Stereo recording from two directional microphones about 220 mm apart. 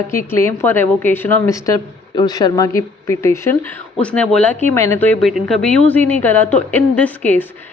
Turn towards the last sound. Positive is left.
turn(degrees=10)  # may be behind; listen again after turning